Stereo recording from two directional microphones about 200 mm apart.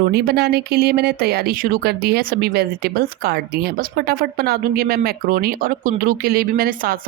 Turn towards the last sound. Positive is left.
turn(degrees=-50)  # may be behind; listen again after turning